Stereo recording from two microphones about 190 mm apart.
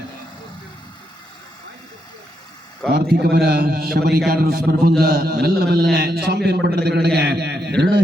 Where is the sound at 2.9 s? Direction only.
60° right (ahead or behind).